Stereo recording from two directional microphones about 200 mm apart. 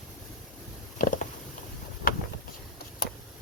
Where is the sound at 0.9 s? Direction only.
40° left (ahead or behind).